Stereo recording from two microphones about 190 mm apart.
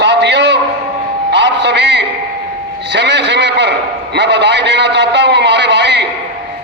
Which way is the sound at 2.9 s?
65° right (ahead or behind).